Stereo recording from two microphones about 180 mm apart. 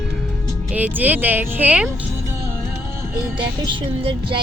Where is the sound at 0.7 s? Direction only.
10° right (ahead or behind).